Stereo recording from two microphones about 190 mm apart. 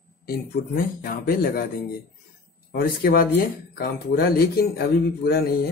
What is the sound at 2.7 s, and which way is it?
A man's voice, 50° left (ahead or behind).